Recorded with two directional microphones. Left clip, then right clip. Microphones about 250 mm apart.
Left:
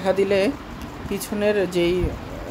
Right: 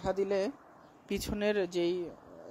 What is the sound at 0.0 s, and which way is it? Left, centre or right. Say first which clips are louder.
Speech: left 12 dB; right.